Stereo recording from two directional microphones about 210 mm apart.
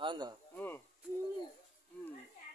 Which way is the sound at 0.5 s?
10° left (ahead or behind).